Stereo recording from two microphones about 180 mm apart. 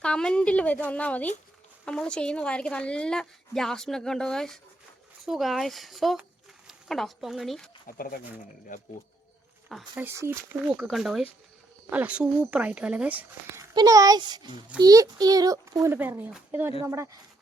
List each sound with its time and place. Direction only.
0.0 s a woman's voice: 5° left (ahead or behind)
7.9 s speech: 50° left (ahead or behind)
9.9 s speech: 15° right (ahead or behind)
13.7 s a child's voice: 20° right (ahead or behind)